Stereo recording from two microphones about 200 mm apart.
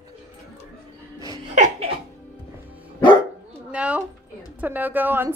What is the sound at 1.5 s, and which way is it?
Laughter, 35° right (ahead or behind).